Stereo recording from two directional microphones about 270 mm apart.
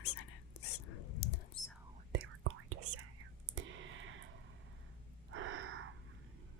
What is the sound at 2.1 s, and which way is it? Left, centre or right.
Whispering, right.